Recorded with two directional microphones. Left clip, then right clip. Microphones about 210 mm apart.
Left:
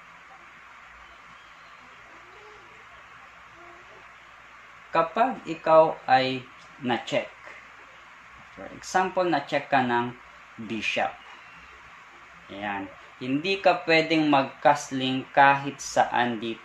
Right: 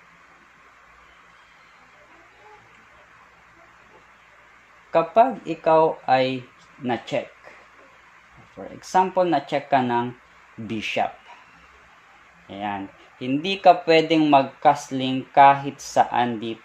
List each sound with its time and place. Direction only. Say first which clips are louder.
4.9 s speech: right 6 dB; 40° right (ahead or behind)
6.8 s speech: right 1 dB; 25° right (ahead or behind)
8.8 s speech: right 5 dB; 40° right (ahead or behind)
12.4 s speech: right 3 dB; 45° right (ahead or behind)